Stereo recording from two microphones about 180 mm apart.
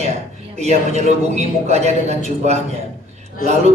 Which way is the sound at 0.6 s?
35° right (ahead or behind).